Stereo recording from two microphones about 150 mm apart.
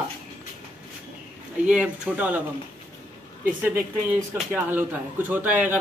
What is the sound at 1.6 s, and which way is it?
Speech, 5° right (ahead or behind).